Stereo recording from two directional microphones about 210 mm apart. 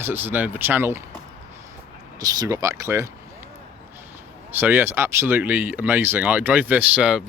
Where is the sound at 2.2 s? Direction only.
15° right (ahead or behind).